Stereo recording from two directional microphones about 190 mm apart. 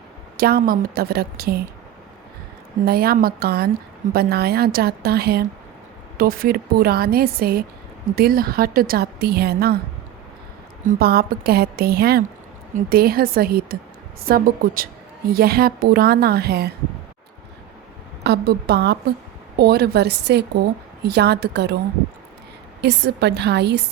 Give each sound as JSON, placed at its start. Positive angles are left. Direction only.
{"t": 0.3, "sound": "a woman's voice", "side_deg": -50}
{"t": 2.8, "sound": "a woman's voice", "side_deg": -55}
{"t": 10.8, "sound": "a woman's voice", "side_deg": -55}
{"t": 18.2, "sound": "a woman's voice", "side_deg": -60}
{"t": 22.8, "sound": "a woman's voice", "side_deg": -60}